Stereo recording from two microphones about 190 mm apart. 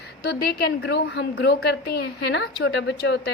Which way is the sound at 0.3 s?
60° left (ahead or behind).